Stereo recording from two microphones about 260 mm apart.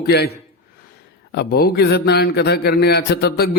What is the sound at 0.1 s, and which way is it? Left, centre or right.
Speech, left.